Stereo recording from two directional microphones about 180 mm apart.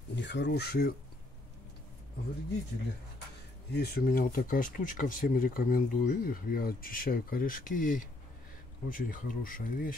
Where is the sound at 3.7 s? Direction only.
60° left (ahead or behind).